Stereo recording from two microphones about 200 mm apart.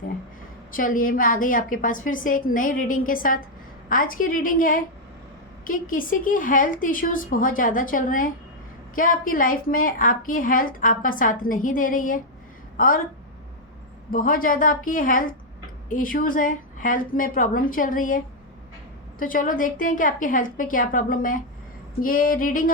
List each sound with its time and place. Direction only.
0.7 s a woman's voice: 45° left (ahead or behind)
14.1 s a woman's voice: 45° left (ahead or behind)
19.2 s a woman's voice: 45° left (ahead or behind)